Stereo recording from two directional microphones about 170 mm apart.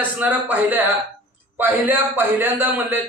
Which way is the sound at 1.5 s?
10° right (ahead or behind).